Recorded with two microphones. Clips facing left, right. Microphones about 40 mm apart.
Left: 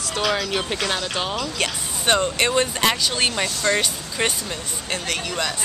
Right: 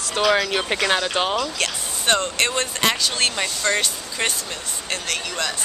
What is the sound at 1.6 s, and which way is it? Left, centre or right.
Speech, centre.